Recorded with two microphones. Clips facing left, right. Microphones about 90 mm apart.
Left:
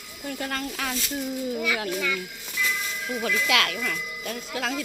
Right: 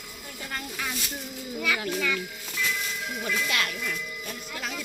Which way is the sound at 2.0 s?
10° left (ahead or behind).